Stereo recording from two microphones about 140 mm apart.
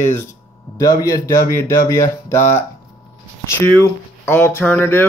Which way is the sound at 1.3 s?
65° left (ahead or behind).